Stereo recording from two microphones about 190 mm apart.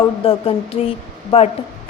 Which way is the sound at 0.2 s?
30° left (ahead or behind).